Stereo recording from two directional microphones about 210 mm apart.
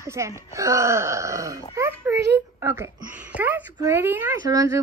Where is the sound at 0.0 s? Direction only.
15° right (ahead or behind).